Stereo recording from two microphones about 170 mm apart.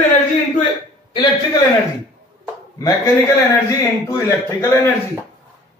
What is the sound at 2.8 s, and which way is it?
A man's voice, 20° left (ahead or behind).